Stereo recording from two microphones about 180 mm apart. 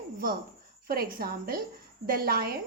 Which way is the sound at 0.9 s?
55° right (ahead or behind).